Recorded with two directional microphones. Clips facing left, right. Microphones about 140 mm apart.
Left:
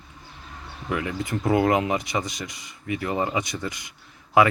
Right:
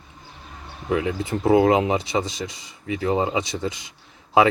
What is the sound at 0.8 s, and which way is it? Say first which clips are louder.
Speech: right 4 dB; 25° right (ahead or behind).